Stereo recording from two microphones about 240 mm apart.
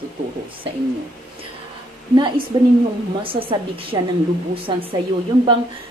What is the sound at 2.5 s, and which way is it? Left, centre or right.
A man's voice, right.